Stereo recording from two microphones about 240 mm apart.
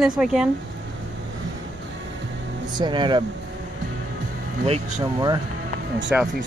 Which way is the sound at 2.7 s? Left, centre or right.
Centre.